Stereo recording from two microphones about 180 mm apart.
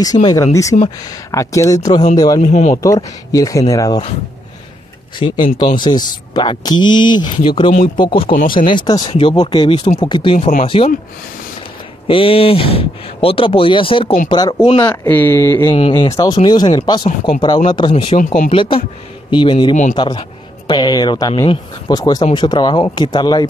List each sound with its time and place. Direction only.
0.0 s speech: 20° left (ahead or behind)
2.4 s speech: 40° left (ahead or behind)
2.7 s speech: 20° left (ahead or behind)
5.2 s speech: 30° left (ahead or behind)
8.3 s speech: 50° left (ahead or behind)
8.5 s speech: 25° left (ahead or behind)
12.1 s speech: 30° left (ahead or behind)
14.9 s speech: 10° left (ahead or behind); by 18.1 s 25° left (ahead or behind)
18.1 s speech: 45° left (ahead or behind)
18.5 s speech: 30° left (ahead or behind)
19.7 s speech: 45° left (ahead or behind)
20.0 s speech: 25° left (ahead or behind)